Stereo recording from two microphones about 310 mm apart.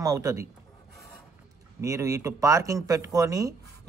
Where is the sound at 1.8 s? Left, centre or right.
Centre.